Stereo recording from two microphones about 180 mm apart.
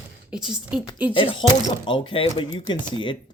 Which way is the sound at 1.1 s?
30° left (ahead or behind).